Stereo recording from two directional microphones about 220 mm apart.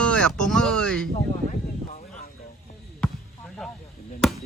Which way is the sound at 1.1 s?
30° left (ahead or behind).